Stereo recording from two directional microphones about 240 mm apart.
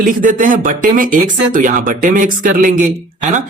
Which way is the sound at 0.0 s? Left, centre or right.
Right.